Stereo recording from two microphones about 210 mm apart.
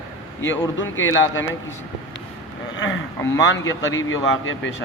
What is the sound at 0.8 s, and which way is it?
Speech, 65° left (ahead or behind).